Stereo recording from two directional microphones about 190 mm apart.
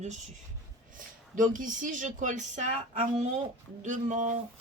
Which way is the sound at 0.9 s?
45° right (ahead or behind).